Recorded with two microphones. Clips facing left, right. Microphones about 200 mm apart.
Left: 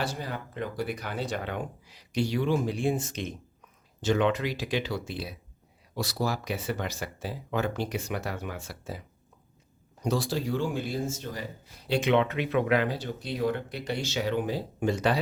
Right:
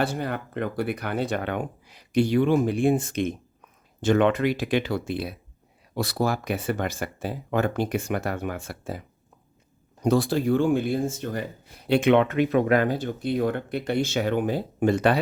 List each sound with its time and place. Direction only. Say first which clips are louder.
0.0 s speech: right 6 dB; 60° right (ahead or behind)